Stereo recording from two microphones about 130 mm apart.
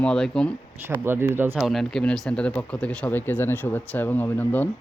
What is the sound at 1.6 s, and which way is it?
Speech, centre (ahead or behind).